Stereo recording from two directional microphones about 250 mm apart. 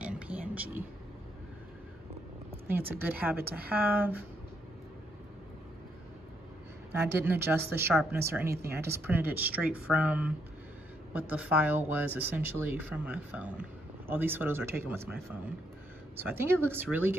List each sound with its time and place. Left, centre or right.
0.0 s a sound: centre
2.9 s speech: centre
6.9 s speech: centre
16.2 s speech: centre